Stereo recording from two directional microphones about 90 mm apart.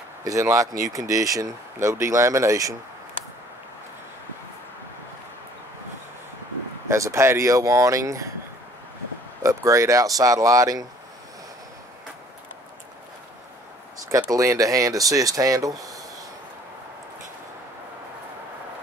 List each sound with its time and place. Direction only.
0.2 s speech: 35° right (ahead or behind)
6.9 s speech: 35° right (ahead or behind)
9.4 s speech: 35° right (ahead or behind)
14.0 s speech: 40° right (ahead or behind)